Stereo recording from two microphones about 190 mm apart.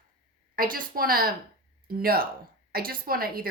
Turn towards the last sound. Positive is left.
turn(degrees=-50)  # may be behind; listen again after turning